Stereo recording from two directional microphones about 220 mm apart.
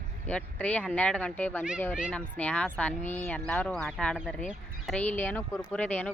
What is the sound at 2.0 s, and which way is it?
Speech, 5° right (ahead or behind).